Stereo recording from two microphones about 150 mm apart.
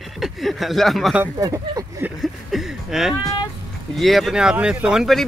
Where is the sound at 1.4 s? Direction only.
20° right (ahead or behind).